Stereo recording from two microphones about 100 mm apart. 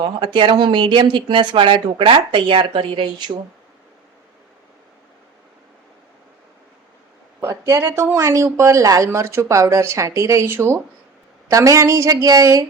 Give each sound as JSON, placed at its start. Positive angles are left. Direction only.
{"t": 0.2, "sound": "speech", "side_deg": -50}
{"t": 7.5, "sound": "a woman's voice", "side_deg": -30}